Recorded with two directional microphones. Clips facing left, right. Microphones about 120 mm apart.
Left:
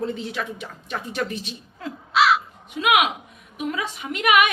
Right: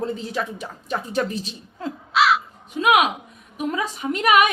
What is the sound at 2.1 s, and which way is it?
Crow, centre (ahead or behind).